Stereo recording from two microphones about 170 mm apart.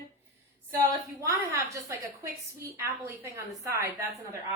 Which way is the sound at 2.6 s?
15° right (ahead or behind).